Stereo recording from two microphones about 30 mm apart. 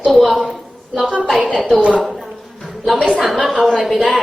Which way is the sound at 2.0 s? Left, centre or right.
Centre.